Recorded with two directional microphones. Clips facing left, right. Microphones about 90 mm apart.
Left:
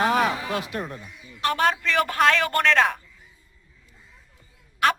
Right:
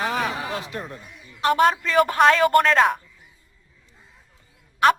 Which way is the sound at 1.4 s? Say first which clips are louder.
Right 4 dB; 25° right (ahead or behind).